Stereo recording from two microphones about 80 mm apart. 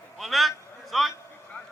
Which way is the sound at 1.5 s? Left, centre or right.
Centre.